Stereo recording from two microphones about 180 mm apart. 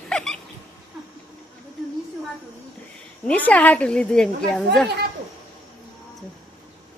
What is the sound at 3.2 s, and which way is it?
Speech, 10° left (ahead or behind).